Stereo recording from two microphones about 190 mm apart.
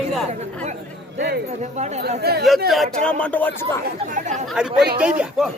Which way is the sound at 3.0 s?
5° left (ahead or behind).